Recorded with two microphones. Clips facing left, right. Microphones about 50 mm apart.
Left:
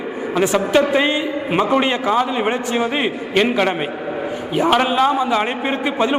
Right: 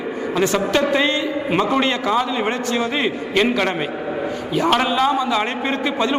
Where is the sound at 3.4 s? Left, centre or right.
Centre.